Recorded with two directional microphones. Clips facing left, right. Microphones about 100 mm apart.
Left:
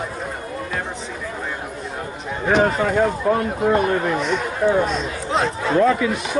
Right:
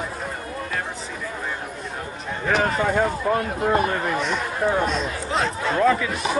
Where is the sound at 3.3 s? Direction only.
5° left (ahead or behind).